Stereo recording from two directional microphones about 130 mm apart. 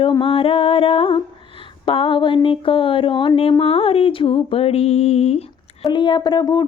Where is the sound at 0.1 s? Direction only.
40° left (ahead or behind).